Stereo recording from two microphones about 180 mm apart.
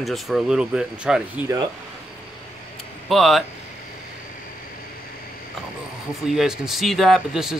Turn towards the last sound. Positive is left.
turn(degrees=-5)  # may be behind; listen again after turning